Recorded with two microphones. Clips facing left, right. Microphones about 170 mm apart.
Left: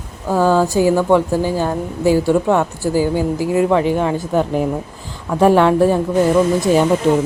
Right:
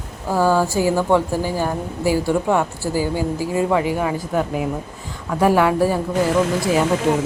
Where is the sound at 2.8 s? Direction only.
20° left (ahead or behind).